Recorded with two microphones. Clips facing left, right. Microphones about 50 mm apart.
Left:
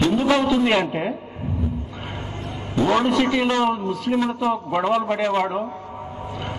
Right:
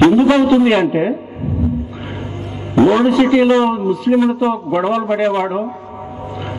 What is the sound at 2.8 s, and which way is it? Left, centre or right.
Speech, centre.